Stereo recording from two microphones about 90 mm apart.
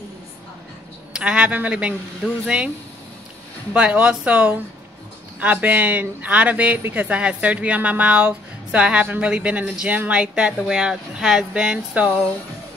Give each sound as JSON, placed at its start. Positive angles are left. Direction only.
{"t": 1.1, "sound": "speech", "side_deg": -10}
{"t": 3.7, "sound": "speech", "side_deg": -15}